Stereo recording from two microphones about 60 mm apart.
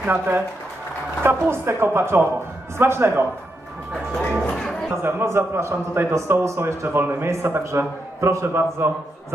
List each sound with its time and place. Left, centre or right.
0.1 s a man's voice: right
4.4 s music: centre
4.9 s a man's voice: right
7.3 s a man's voice: right